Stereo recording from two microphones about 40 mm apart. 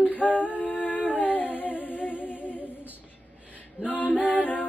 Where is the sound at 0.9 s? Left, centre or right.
Left.